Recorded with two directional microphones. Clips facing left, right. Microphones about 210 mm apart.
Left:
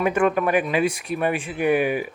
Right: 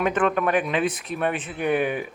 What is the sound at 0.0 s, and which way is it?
Speech, 10° left (ahead or behind).